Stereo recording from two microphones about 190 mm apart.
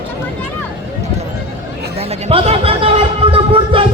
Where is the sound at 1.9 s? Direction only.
30° right (ahead or behind).